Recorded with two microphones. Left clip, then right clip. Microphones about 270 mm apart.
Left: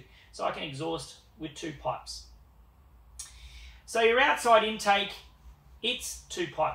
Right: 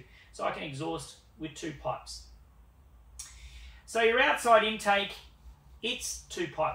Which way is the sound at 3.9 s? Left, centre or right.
Centre.